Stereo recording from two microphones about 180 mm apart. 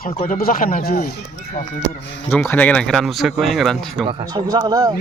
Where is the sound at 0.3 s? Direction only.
55° left (ahead or behind).